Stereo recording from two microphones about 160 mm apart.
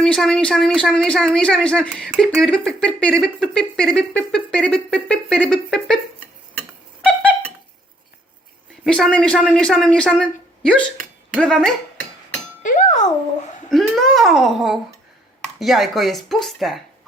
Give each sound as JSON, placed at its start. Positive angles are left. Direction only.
{"t": 0.0, "sound": "speech", "side_deg": 5}
{"t": 8.8, "sound": "a woman's voice", "side_deg": 5}
{"t": 12.6, "sound": "music", "side_deg": 50}
{"t": 13.7, "sound": "a child's voice", "side_deg": 0}